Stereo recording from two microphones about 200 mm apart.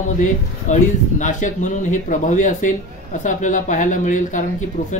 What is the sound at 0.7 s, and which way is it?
Speech, 40° left (ahead or behind).